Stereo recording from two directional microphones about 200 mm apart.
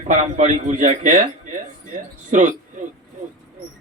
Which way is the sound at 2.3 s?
40° right (ahead or behind).